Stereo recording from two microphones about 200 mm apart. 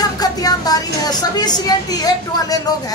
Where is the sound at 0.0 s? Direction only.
20° left (ahead or behind).